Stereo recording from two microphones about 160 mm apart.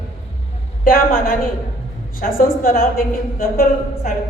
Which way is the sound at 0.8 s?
60° left (ahead or behind).